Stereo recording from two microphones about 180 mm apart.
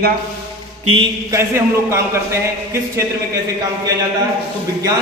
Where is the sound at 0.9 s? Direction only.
15° right (ahead or behind).